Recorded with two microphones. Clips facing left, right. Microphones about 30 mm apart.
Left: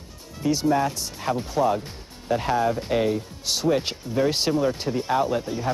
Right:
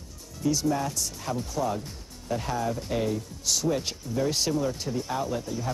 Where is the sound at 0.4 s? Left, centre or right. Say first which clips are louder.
Left 5 dB; left.